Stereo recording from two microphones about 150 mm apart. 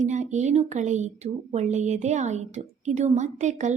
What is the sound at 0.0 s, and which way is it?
A woman's voice, 50° right (ahead or behind).